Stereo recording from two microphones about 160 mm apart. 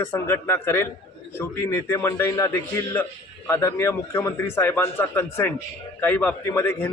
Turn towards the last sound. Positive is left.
turn(degrees=15)  # may be behind; listen again after turning